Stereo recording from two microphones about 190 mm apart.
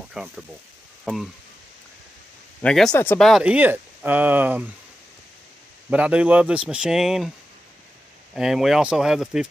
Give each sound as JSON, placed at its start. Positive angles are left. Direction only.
{"t": 0.1, "sound": "speech", "side_deg": 0}
{"t": 2.6, "sound": "speech", "side_deg": 5}
{"t": 5.9, "sound": "speech", "side_deg": -5}
{"t": 8.4, "sound": "speech", "side_deg": 0}